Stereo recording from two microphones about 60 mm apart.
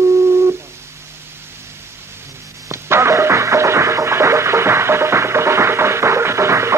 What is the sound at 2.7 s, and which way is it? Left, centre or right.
Music, right.